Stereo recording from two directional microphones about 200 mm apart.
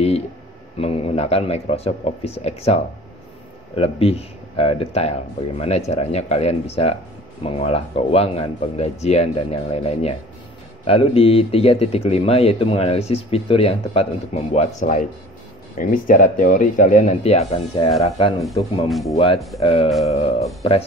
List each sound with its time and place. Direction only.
0.7 s speech: 30° left (ahead or behind)
18.9 s speech: centre (ahead or behind)
19.1 s speech: 30° left (ahead or behind)